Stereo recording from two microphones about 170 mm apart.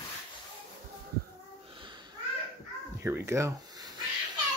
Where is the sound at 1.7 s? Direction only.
30° right (ahead or behind).